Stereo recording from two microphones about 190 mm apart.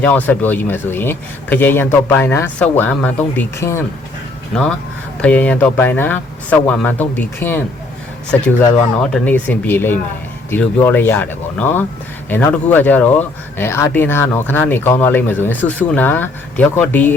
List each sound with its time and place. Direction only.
0.0 s speech: 10° left (ahead or behind)
4.5 s speech: 5° left (ahead or behind)